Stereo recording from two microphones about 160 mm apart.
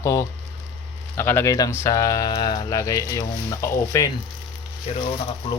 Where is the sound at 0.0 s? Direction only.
20° left (ahead or behind).